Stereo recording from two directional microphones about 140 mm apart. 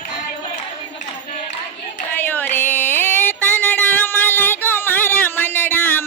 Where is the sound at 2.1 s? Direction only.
15° left (ahead or behind).